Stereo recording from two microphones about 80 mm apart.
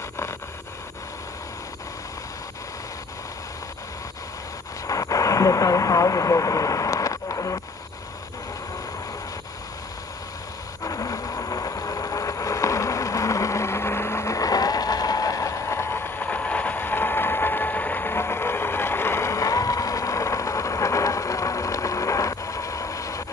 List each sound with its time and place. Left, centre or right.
4.8 s vehicle: left
10.8 s vehicle: left
16.3 s vehicle: centre; by 23.2 s left